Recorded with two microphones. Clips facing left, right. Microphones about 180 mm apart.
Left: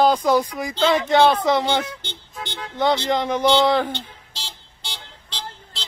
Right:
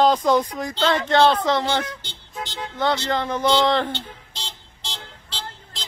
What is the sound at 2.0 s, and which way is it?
Vehicle, 60° left (ahead or behind).